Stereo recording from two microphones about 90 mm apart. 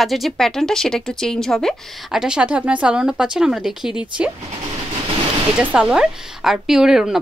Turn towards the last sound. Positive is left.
turn(degrees=-5)  # may be behind; listen again after turning